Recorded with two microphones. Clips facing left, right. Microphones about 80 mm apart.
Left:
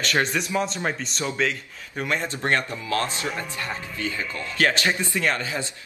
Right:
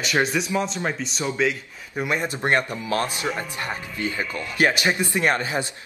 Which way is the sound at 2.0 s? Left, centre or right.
Centre.